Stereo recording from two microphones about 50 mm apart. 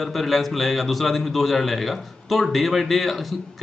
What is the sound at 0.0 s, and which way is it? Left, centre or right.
A man's voice, centre.